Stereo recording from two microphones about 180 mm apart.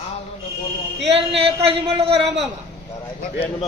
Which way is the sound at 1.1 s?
35° right (ahead or behind).